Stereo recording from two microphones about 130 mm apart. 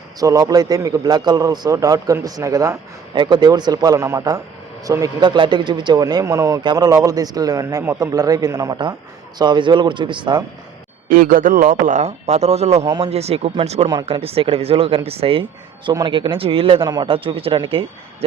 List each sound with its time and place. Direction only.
0.2 s a man's voice: 30° right (ahead or behind)
11.1 s a man's voice: 90° right; by 12.8 s 55° right (ahead or behind)
12.8 s speech: 30° right (ahead or behind)
13.1 s speech: 55° right (ahead or behind)
15.9 s speech: 35° right (ahead or behind)
16.8 s speech: 35° right (ahead or behind)